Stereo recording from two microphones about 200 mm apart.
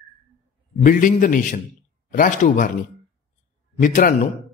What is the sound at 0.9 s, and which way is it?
Speech, 40° left (ahead or behind).